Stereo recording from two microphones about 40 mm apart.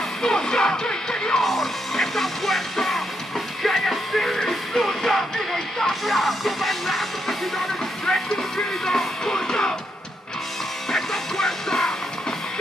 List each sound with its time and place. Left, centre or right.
0.2 s music: centre
1.4 s music: centre
10.9 s music: centre